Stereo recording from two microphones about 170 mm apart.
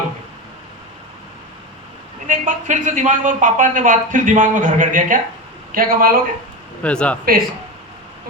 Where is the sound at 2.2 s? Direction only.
50° right (ahead or behind).